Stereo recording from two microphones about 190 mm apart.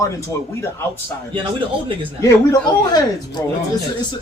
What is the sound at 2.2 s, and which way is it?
Speech, 20° left (ahead or behind).